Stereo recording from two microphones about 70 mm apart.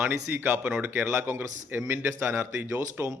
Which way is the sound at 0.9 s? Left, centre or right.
Right.